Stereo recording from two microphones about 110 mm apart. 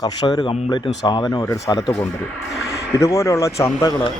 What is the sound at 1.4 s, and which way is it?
Speech, 30° left (ahead or behind).